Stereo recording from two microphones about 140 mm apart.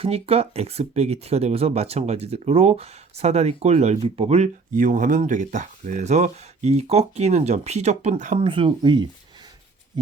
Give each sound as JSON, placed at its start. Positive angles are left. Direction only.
{"t": 0.0, "sound": "speech", "side_deg": -45}
{"t": 4.7, "sound": "speech", "side_deg": -70}
{"t": 8.4, "sound": "speech", "side_deg": -40}